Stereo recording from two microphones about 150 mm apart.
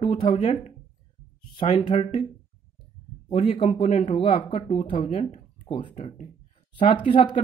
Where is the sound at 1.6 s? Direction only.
35° left (ahead or behind).